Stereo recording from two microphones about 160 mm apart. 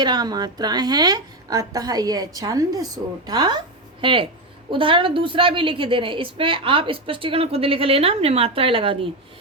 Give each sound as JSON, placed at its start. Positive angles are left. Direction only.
{"t": 0.0, "sound": "a woman's voice", "side_deg": -25}